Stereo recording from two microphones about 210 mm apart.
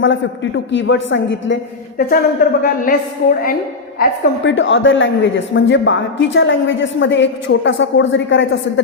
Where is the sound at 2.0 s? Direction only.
45° left (ahead or behind).